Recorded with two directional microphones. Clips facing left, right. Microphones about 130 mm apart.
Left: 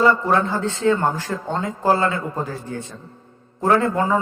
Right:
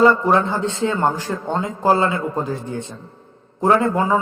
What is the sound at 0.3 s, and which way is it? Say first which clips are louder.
Speech: right 2 dB; 20° right (ahead or behind).